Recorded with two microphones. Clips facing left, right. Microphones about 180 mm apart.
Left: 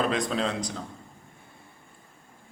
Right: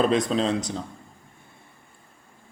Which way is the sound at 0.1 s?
25° right (ahead or behind).